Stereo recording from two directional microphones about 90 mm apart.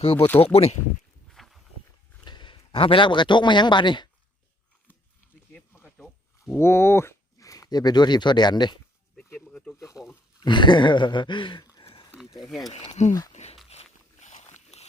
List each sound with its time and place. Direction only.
0.0 s speech: 90° left
1.3 s walk: centre (ahead or behind)
2.2 s a man's voice: 55° left (ahead or behind)
6.6 s speech: 30° left (ahead or behind); by 8.8 s 55° left (ahead or behind)
9.3 s a sound: 15° left (ahead or behind)
9.7 s speech: 40° left (ahead or behind)
10.4 s speech: 60° left (ahead or behind)
11.8 s a sound: 75° left (ahead or behind)
12.4 s speech: centre (ahead or behind)